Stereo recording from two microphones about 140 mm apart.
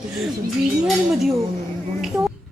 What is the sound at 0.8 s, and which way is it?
Speech, centre (ahead or behind).